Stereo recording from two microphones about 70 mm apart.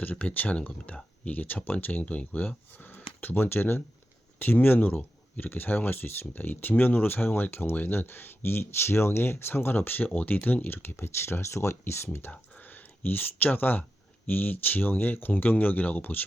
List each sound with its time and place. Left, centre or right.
0.0 s speech: left